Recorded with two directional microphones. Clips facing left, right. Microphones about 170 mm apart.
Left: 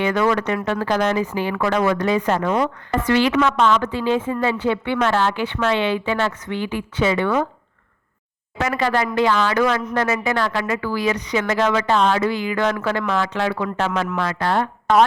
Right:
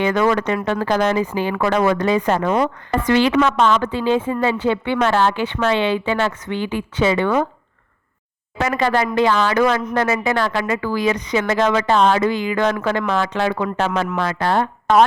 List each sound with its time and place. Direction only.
0.0 s a woman's voice: 30° right (ahead or behind)
8.7 s speech: 30° right (ahead or behind)
12.5 s a woman's voice: 20° right (ahead or behind)